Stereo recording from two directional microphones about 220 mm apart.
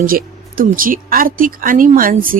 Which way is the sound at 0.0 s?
40° right (ahead or behind).